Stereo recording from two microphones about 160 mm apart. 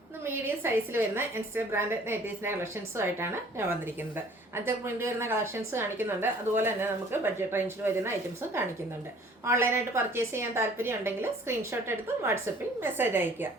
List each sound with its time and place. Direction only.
0.3 s a woman's voice: 15° right (ahead or behind)